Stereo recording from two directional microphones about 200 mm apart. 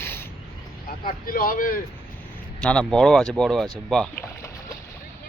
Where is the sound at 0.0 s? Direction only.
10° left (ahead or behind).